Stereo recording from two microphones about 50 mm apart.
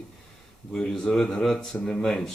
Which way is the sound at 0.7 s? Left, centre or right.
Centre.